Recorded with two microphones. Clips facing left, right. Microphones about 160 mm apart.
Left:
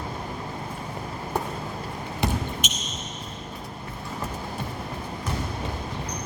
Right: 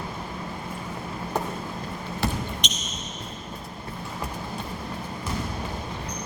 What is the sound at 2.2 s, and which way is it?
Basketball bounce, 20° left (ahead or behind).